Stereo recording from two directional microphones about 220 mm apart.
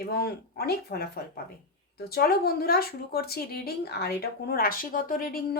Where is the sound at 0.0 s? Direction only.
45° left (ahead or behind).